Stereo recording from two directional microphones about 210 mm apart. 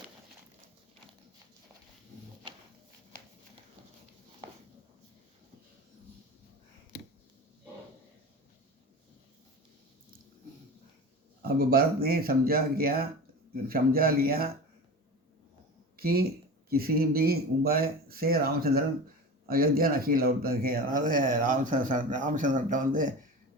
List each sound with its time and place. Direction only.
11.4 s speech: 45° right (ahead or behind)
16.0 s speech: 45° right (ahead or behind)